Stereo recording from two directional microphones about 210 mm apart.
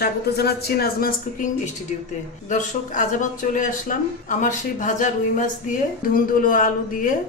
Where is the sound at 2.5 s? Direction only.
35° left (ahead or behind).